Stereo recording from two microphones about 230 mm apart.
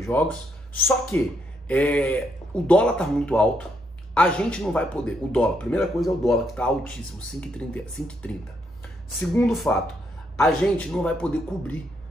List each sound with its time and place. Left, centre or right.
0.0 s speech: centre